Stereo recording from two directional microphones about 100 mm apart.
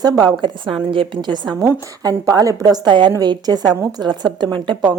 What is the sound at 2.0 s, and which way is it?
A woman's voice, 35° right (ahead or behind).